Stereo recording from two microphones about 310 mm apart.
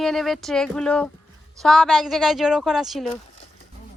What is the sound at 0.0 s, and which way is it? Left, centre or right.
A woman's voice, centre.